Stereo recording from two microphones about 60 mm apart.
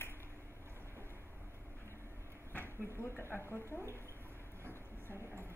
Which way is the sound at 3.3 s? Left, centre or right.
Left.